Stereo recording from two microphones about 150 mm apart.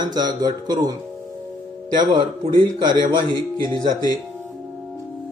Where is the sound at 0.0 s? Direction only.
25° right (ahead or behind).